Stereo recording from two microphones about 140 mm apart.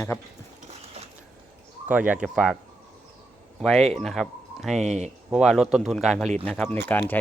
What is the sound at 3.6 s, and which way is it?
Speech, centre (ahead or behind).